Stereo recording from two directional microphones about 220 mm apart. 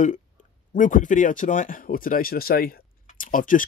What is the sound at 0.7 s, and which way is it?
Speech, 35° left (ahead or behind).